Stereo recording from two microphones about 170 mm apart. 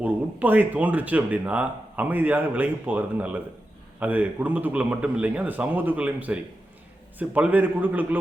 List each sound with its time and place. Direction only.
0.0 s speech: 10° right (ahead or behind)